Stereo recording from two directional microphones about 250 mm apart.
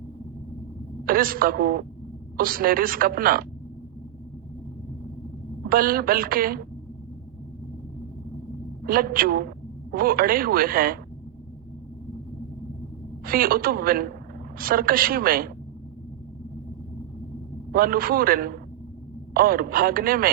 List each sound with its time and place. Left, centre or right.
1.0 s a woman's voice: right
5.6 s a woman's voice: right
8.8 s a woman's voice: right
13.2 s a woman's voice: right
17.7 s a woman's voice: right